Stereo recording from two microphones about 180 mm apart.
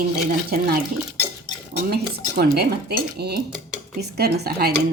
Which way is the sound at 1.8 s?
60° right (ahead or behind).